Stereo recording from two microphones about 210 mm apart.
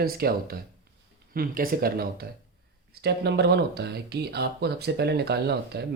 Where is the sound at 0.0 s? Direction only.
45° right (ahead or behind).